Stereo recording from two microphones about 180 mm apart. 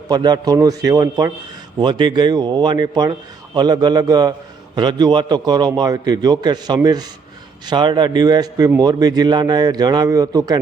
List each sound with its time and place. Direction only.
0.1 s a man's voice: 20° right (ahead or behind)